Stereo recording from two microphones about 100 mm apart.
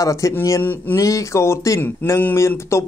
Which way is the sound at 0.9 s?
30° left (ahead or behind).